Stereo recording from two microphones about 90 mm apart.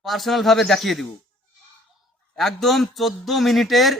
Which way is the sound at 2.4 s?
Centre (ahead or behind).